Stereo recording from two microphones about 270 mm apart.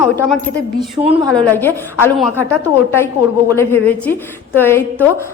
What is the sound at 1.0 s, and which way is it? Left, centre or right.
Speech, right.